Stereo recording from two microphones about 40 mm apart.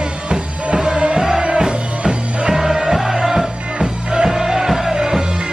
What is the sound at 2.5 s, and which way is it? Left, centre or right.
Music, centre.